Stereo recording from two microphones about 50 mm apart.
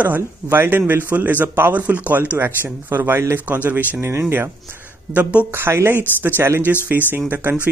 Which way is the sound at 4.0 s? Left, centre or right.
Right.